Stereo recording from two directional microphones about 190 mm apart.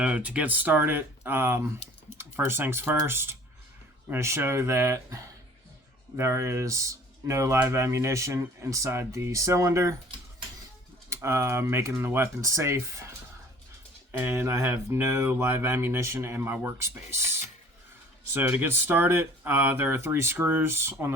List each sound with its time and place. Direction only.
0.0 s speech: 5° right (ahead or behind)
11.1 s speech: 15° right (ahead or behind)
18.3 s speech: 10° right (ahead or behind)